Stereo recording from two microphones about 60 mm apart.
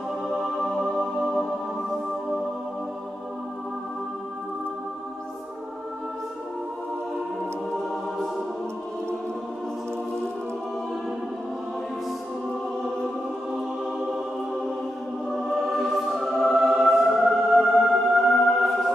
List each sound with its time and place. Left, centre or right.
0.4 s music: centre
14.1 s music: centre